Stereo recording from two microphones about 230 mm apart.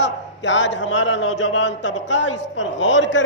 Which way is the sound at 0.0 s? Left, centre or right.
Left.